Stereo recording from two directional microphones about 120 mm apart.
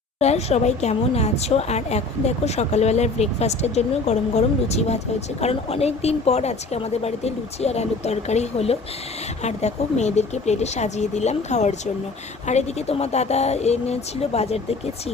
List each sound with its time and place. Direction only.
0.2 s a woman's voice: 65° left (ahead or behind)